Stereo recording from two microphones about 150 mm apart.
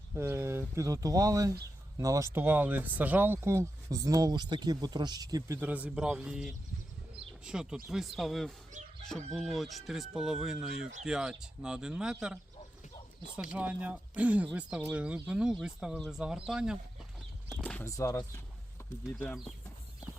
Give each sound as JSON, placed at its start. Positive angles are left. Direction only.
{"t": 0.2, "sound": "speech", "side_deg": -15}
{"t": 5.5, "sound": "speech", "side_deg": -10}
{"t": 13.5, "sound": "speech", "side_deg": -10}
{"t": 17.6, "sound": "a sound", "side_deg": 10}
{"t": 17.9, "sound": "speech", "side_deg": 20}